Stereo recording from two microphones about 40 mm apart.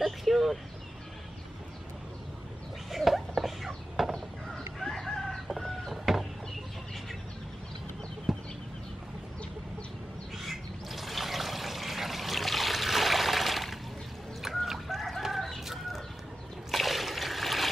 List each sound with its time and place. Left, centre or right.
0.0 s a sound: centre
2.9 s a sound: centre
4.1 s chicken: centre
6.1 s chicken: centre
8.3 s chicken: centre
10.3 s water: centre
14.4 s chicken: centre
16.7 s trickle: centre